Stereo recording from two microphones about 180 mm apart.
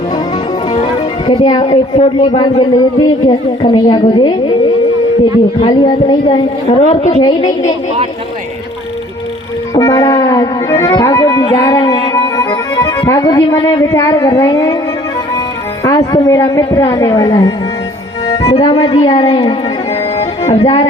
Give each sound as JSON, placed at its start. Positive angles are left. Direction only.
{"t": 1.3, "sound": "a woman's voice", "side_deg": 25}
{"t": 5.6, "sound": "a woman's voice", "side_deg": 25}
{"t": 9.7, "sound": "music", "side_deg": 20}
{"t": 15.8, "sound": "a woman's voice", "side_deg": 20}
{"t": 18.3, "sound": "speech", "side_deg": 30}
{"t": 19.3, "sound": "a woman's voice", "side_deg": 20}
{"t": 20.5, "sound": "music", "side_deg": 30}